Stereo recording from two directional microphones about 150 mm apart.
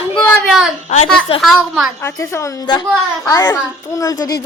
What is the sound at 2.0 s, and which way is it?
A child's voice, 15° left (ahead or behind).